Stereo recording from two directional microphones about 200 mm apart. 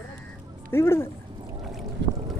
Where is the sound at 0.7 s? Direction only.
10° left (ahead or behind).